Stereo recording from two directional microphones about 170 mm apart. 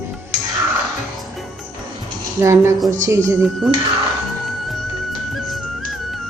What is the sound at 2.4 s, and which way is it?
Speech, 15° right (ahead or behind).